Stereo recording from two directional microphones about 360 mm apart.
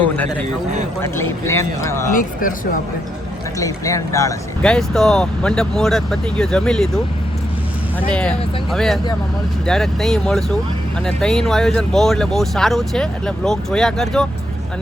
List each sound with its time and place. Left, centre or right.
0.0 s a man's voice: centre
2.1 s speech: left
3.6 s speech: centre
8.1 s speech: centre